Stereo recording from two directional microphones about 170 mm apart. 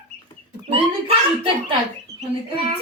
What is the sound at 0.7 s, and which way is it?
A child's voice, 30° right (ahead or behind).